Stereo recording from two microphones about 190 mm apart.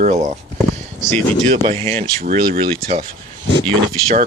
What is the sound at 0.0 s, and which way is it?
Speech, 40° right (ahead or behind).